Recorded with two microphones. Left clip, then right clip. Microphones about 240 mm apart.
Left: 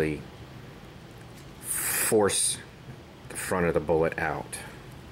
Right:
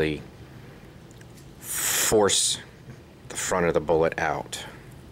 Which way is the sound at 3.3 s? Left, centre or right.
Centre.